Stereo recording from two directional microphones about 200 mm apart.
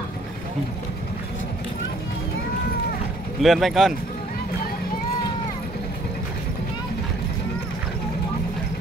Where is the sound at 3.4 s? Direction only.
Centre (ahead or behind).